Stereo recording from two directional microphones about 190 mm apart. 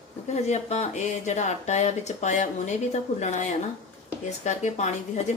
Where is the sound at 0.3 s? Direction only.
35° left (ahead or behind).